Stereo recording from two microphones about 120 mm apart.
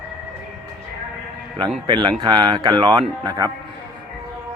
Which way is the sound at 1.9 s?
40° right (ahead or behind).